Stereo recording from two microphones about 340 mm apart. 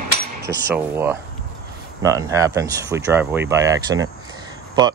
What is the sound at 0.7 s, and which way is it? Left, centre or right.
Speech, centre.